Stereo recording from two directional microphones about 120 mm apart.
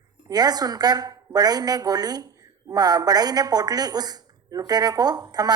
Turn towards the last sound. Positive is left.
turn(degrees=-35)  # may be behind; listen again after turning